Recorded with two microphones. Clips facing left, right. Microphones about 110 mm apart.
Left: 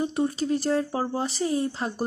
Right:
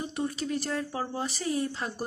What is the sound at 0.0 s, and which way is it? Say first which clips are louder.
Speech: left 6 dB; 30° left (ahead or behind).